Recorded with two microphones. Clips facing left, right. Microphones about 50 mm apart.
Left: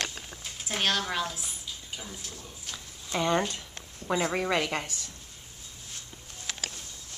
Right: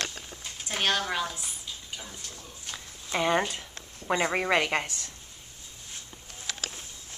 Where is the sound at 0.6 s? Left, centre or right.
Centre.